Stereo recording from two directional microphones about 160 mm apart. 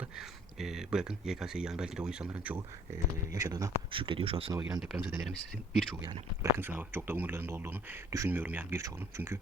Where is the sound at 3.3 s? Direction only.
20° right (ahead or behind).